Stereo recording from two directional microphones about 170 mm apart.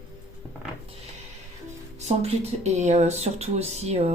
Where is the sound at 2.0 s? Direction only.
40° right (ahead or behind).